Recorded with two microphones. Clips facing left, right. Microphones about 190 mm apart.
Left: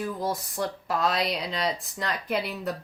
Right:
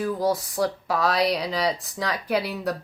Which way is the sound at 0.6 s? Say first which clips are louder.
Right 3 dB; 70° right (ahead or behind).